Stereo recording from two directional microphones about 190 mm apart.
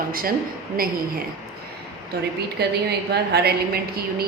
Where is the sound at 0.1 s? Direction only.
50° right (ahead or behind).